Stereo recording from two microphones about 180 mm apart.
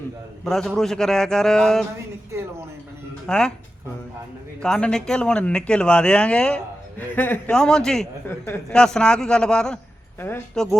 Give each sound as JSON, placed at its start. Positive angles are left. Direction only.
{"t": 0.4, "sound": "a man's voice", "side_deg": 5}
{"t": 2.3, "sound": "a sound", "side_deg": -15}
{"t": 3.2, "sound": "a man's voice", "side_deg": 5}
{"t": 4.6, "sound": "a man's voice", "side_deg": 5}